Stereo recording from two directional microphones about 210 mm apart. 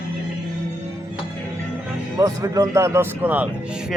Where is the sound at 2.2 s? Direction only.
15° right (ahead or behind).